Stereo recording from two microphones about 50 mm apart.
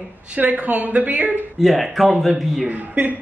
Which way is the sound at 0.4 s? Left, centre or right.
Right.